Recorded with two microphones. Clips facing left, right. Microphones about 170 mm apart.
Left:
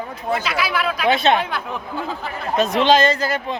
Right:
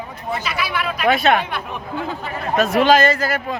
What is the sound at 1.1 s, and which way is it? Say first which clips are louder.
Speech: right 1 dB; 25° left (ahead or behind).